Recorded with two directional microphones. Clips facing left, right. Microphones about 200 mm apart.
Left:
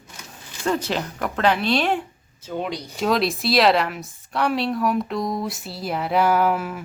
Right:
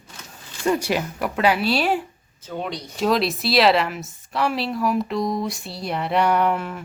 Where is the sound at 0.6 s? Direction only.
10° right (ahead or behind).